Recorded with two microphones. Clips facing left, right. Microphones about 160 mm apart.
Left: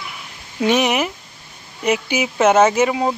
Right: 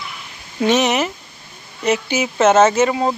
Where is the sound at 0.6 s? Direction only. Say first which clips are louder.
Right 1 dB; 10° left (ahead or behind).